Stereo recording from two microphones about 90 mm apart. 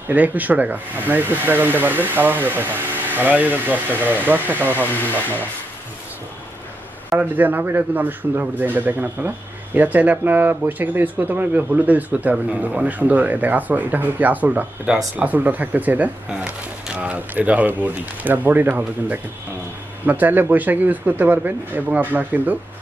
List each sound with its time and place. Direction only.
0.1 s speech: 20° right (ahead or behind)
7.1 s speech: 20° right (ahead or behind)